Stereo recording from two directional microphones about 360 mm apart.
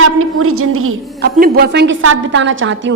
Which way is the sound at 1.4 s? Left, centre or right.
Right.